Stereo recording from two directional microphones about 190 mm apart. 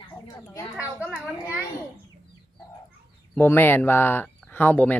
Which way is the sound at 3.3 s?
10° left (ahead or behind).